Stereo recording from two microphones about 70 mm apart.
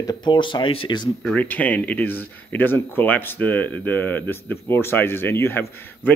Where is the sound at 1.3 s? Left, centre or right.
Left.